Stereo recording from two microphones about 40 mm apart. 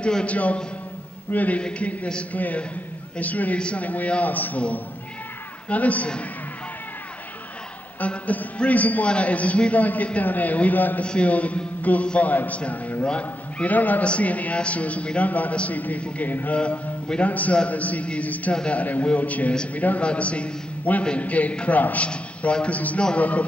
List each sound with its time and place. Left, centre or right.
0.3 s a man's voice: left
1.6 s a man's voice: left
2.3 s a man's voice: left
3.5 s a man's voice: left
3.8 s a man's voice: left
5.7 s a man's voice: left
8.0 s a man's voice: left
11.2 s a man's voice: left
13.7 s a man's voice: left
17.2 s a man's voice: left
18.5 s a man's voice: left
18.8 s a man's voice: left
20.0 s a man's voice: left
22.1 s a man's voice: left